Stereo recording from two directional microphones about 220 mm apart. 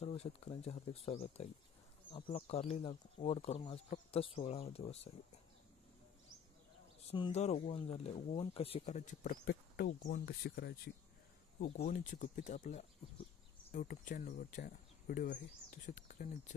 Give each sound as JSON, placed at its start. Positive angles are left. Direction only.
{"t": 0.0, "sound": "speech", "side_deg": 25}
{"t": 7.1, "sound": "speech", "side_deg": 25}